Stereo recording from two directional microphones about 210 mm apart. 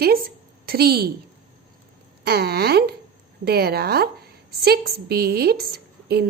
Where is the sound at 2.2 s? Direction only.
50° right (ahead or behind).